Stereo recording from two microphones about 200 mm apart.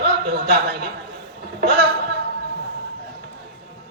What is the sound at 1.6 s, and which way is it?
Speech, 50° right (ahead or behind).